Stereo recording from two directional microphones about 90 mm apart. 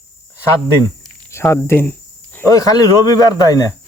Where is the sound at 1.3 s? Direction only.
30° left (ahead or behind).